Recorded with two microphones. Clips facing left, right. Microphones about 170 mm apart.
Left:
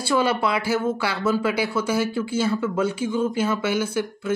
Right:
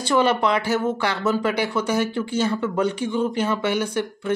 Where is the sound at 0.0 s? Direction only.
10° left (ahead or behind).